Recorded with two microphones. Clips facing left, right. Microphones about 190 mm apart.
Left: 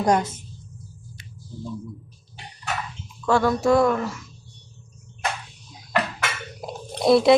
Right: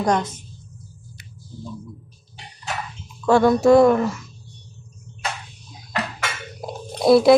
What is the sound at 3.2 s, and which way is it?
Speech, 15° right (ahead or behind).